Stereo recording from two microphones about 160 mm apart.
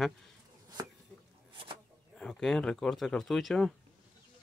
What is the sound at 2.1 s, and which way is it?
Speech, 5° left (ahead or behind).